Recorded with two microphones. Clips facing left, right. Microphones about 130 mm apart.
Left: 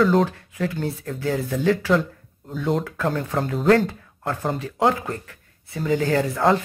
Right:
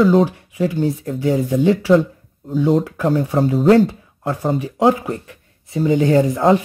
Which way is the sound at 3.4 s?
5° right (ahead or behind).